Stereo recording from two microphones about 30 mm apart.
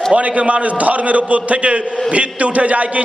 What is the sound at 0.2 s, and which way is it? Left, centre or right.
A man's voice, right.